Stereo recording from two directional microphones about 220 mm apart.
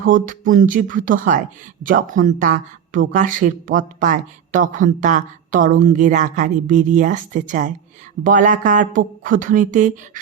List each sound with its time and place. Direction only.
0.1 s speech: 35° right (ahead or behind)